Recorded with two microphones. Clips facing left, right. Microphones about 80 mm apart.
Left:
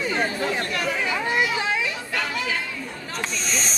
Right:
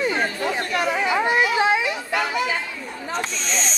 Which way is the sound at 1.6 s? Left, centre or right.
Right.